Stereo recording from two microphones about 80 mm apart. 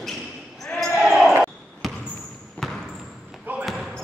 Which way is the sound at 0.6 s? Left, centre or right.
Centre.